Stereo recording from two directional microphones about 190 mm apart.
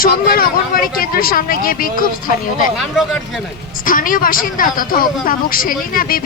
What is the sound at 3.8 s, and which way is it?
Speech, 45° left (ahead or behind).